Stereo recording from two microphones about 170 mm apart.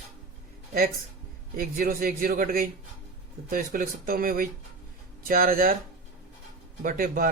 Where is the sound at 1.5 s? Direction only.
60° right (ahead or behind).